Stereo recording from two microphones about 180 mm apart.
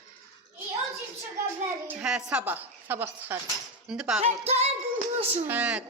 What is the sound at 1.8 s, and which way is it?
A woman's voice, 5° right (ahead or behind).